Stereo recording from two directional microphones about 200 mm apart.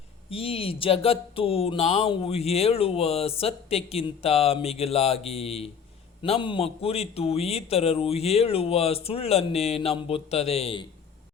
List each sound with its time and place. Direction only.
0.3 s a man's voice: 30° left (ahead or behind)